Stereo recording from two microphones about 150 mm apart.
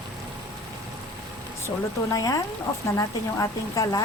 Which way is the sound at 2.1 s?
25° left (ahead or behind).